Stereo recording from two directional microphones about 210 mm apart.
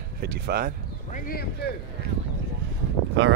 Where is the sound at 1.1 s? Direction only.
45° left (ahead or behind).